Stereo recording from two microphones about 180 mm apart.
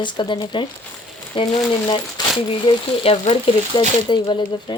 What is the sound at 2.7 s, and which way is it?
Speech, 30° left (ahead or behind).